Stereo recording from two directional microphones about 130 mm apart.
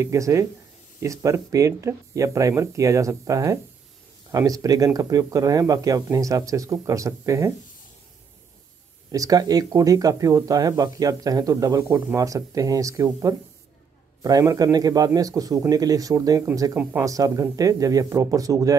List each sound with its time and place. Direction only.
0.0 s speech: 20° right (ahead or behind)
9.1 s speech: 25° right (ahead or behind)